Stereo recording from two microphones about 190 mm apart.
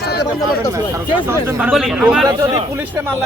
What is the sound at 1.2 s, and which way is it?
Speech, 5° right (ahead or behind).